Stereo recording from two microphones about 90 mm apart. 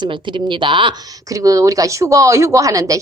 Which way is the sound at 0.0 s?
65° right (ahead or behind).